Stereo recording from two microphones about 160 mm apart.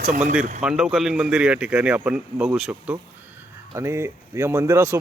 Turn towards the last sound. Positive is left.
turn(degrees=-15)  # may be behind; listen again after turning